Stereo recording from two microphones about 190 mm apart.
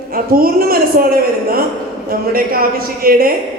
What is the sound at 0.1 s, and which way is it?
A woman's voice, 50° right (ahead or behind).